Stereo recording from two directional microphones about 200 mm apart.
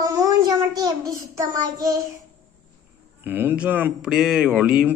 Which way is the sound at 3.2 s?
10° right (ahead or behind).